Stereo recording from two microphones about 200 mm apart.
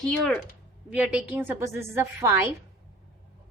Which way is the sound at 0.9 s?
5° right (ahead or behind).